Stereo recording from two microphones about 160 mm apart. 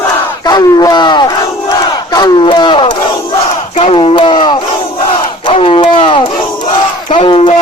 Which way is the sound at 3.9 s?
35° left (ahead or behind).